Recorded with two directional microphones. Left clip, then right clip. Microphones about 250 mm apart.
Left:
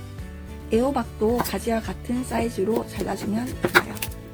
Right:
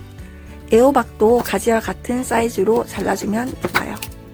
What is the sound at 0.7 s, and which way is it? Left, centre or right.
Speech, right.